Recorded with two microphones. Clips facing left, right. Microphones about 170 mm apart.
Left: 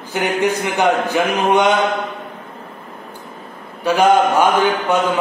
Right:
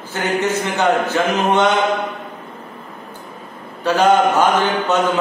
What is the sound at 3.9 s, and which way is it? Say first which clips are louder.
A man's voice: left 1 dB; 10° left (ahead or behind).